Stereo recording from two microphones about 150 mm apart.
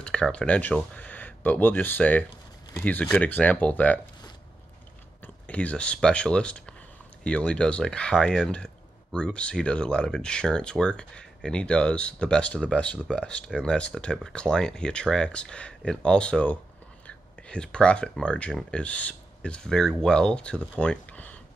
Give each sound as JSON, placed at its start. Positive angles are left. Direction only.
{"t": 0.0, "sound": "speech", "side_deg": 5}
{"t": 5.2, "sound": "speech", "side_deg": 10}
{"t": 20.8, "sound": "a sound", "side_deg": 10}